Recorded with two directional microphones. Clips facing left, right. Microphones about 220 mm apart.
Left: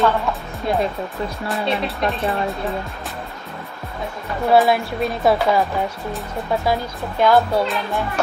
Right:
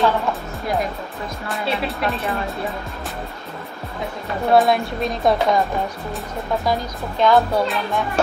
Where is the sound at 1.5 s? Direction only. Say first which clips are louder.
Even; centre (ahead or behind).